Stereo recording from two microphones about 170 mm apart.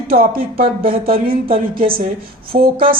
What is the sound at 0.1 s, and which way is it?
Speech, 60° right (ahead or behind).